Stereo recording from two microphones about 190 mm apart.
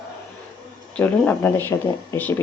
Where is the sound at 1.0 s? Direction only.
10° left (ahead or behind).